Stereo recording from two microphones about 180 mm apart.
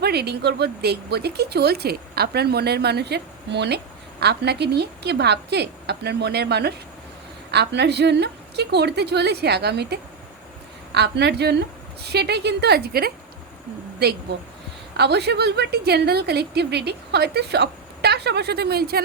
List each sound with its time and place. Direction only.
0.0 s a woman's voice: 65° right (ahead or behind)
14.9 s a woman's voice: 65° right (ahead or behind)